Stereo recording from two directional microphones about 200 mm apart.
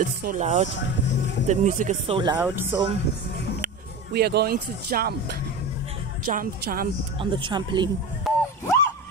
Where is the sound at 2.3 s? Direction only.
10° right (ahead or behind).